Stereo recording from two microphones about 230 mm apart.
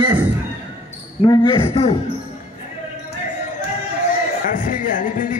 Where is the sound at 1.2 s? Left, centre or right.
Left.